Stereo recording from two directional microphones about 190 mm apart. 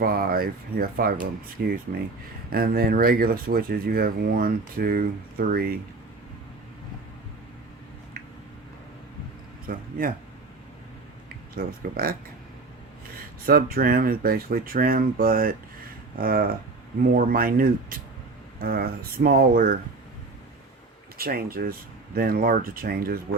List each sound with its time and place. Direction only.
0.0 s speech: 50° right (ahead or behind)
9.6 s speech: 45° right (ahead or behind)
11.5 s speech: 50° right (ahead or behind)
13.4 s speech: 50° right (ahead or behind)
21.2 s speech: 50° right (ahead or behind)